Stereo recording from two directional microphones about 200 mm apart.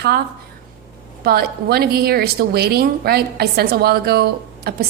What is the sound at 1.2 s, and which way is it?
A woman's voice, 50° right (ahead or behind).